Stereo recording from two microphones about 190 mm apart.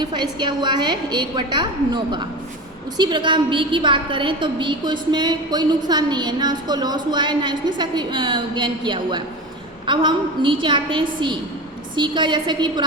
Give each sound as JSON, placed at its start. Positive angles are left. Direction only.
{"t": 0.0, "sound": "a woman's voice", "side_deg": -25}